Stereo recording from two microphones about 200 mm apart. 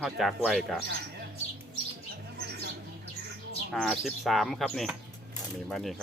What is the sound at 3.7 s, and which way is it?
Speech, centre (ahead or behind).